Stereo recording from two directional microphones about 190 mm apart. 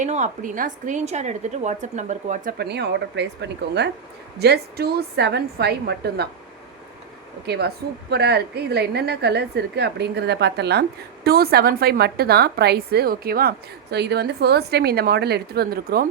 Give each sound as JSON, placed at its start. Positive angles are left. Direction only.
{"t": 0.0, "sound": "a woman's voice", "side_deg": -40}
{"t": 7.4, "sound": "a woman's voice", "side_deg": -60}